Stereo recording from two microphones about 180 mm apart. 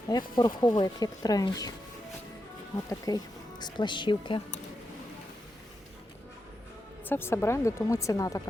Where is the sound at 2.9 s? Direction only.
20° left (ahead or behind).